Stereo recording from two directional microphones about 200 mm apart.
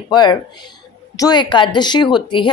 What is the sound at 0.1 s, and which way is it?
Speech, 20° left (ahead or behind).